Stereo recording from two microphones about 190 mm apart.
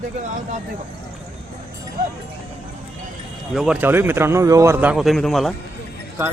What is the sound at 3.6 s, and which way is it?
A man's voice, 5° right (ahead or behind).